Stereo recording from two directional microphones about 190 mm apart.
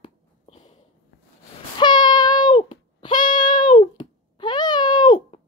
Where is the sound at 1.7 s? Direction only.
25° left (ahead or behind).